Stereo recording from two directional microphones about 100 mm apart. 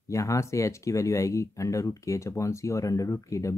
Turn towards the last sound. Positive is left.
turn(degrees=30)  # may be behind; listen again after turning